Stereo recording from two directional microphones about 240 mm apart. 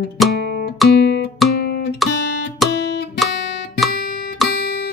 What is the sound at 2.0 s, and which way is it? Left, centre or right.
Music, centre.